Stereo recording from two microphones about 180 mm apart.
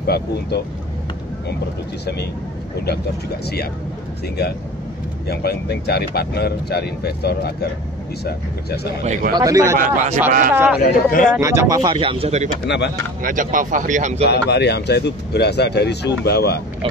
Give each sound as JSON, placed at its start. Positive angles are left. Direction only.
{"t": 0.0, "sound": "speech", "side_deg": 65}
{"t": 5.2, "sound": "speech", "side_deg": 60}
{"t": 9.0, "sound": "a man's voice", "side_deg": -40}
{"t": 9.3, "sound": "speech", "side_deg": -20}
{"t": 9.8, "sound": "a man's voice", "side_deg": -40}
{"t": 10.5, "sound": "speech", "side_deg": -10}
{"t": 10.8, "sound": "speech", "side_deg": 50}
{"t": 11.3, "sound": "speech", "side_deg": -15}
{"t": 12.6, "sound": "speech", "side_deg": 70}
{"t": 13.2, "sound": "speech", "side_deg": -50}
{"t": 14.3, "sound": "speech", "side_deg": 70}